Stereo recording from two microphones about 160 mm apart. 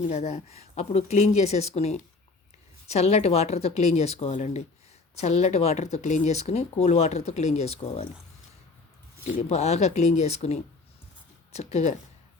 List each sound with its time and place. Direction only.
0.1 s speech: 40° left (ahead or behind)
9.4 s speech: 40° left (ahead or behind)